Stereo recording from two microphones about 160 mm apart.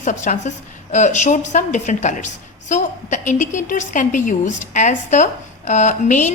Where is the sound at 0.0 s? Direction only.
50° left (ahead or behind).